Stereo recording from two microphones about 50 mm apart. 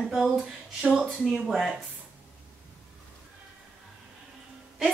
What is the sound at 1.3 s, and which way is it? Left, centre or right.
Speech, centre.